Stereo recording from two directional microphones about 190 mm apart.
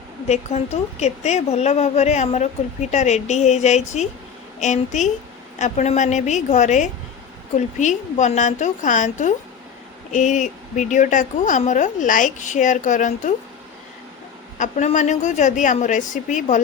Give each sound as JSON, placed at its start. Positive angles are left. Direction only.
{"t": 0.3, "sound": "a woman's voice", "side_deg": 35}
{"t": 14.6, "sound": "a woman's voice", "side_deg": 40}